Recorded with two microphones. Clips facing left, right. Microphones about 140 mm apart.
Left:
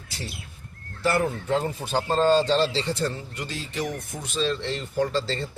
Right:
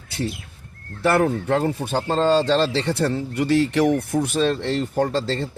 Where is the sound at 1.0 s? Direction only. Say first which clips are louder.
Right 5 dB; 60° right (ahead or behind).